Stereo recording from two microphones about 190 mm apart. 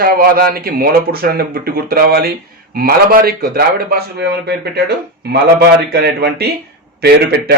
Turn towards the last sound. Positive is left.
turn(degrees=-60)  # may be behind; listen again after turning